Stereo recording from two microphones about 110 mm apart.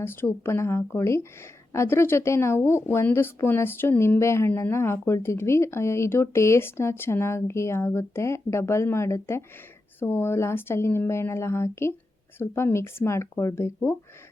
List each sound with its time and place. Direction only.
0.0 s speech: 20° left (ahead or behind)